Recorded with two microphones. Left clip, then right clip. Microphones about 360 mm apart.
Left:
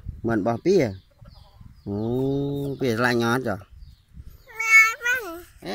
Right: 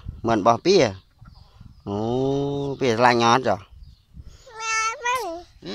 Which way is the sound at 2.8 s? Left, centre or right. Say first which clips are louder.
Right 5 dB; centre.